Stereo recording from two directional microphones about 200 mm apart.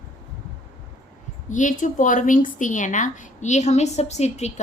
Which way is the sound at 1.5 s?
40° left (ahead or behind).